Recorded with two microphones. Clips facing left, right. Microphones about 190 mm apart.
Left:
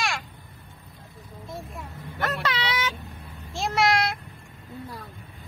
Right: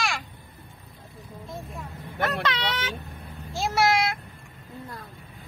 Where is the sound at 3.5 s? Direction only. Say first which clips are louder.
Even; centre (ahead or behind).